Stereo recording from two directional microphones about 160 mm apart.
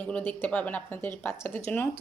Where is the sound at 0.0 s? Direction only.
10° left (ahead or behind).